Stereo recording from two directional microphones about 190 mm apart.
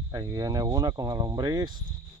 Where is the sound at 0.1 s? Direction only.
20° right (ahead or behind).